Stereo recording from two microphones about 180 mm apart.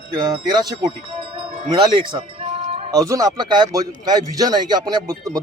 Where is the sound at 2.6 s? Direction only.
35° right (ahead or behind).